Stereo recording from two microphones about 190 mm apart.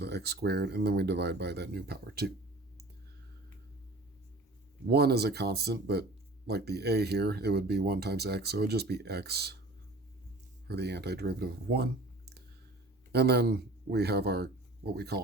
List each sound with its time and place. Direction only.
0.0 s speech: 60° right (ahead or behind)
4.9 s speech: 55° right (ahead or behind)
10.7 s speech: 60° right (ahead or behind)